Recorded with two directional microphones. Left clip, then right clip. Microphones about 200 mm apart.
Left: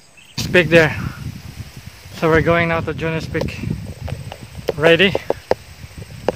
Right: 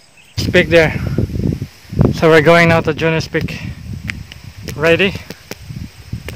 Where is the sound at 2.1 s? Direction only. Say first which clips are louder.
Right 6 dB; 45° right (ahead or behind).